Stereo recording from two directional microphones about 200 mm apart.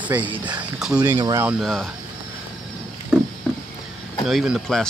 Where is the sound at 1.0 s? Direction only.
20° right (ahead or behind).